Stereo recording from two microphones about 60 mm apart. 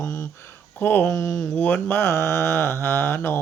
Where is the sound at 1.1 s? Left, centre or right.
Left.